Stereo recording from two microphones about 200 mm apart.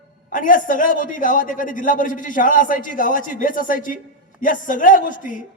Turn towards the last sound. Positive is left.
turn(degrees=40)  # may be behind; listen again after turning